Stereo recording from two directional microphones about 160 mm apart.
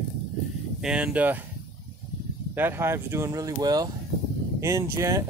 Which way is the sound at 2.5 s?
15° right (ahead or behind).